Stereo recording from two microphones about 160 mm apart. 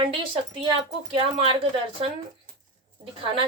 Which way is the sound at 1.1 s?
35° right (ahead or behind).